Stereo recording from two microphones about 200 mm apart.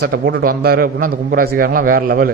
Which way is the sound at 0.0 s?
55° right (ahead or behind).